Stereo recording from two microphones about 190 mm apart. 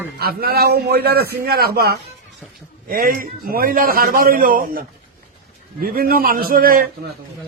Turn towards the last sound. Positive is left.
turn(degrees=-50)  # may be behind; listen again after turning